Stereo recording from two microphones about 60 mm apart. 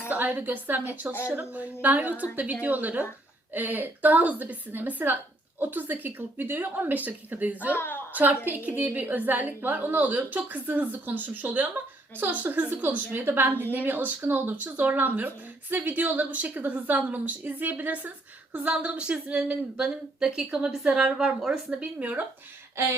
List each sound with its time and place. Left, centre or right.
0.1 s a woman's voice: right
7.8 s a woman's voice: left
8.1 s a woman's voice: right
18.7 s a woman's voice: centre
22.8 s a sound: right